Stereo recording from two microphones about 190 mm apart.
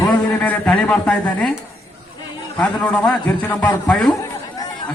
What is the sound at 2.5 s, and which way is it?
Speech, 5° left (ahead or behind).